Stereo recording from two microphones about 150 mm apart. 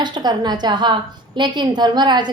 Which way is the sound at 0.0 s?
30° right (ahead or behind).